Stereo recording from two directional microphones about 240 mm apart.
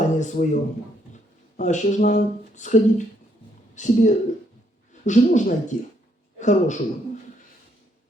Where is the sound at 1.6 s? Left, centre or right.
Left.